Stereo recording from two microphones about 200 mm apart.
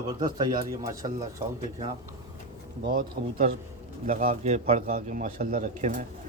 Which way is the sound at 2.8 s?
45° right (ahead or behind).